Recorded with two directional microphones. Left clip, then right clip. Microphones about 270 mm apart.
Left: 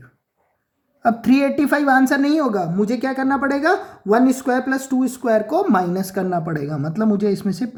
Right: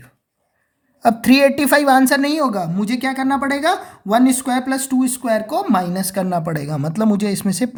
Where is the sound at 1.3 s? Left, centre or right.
Right.